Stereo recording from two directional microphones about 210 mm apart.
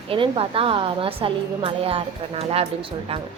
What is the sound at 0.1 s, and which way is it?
A woman's voice, 25° right (ahead or behind).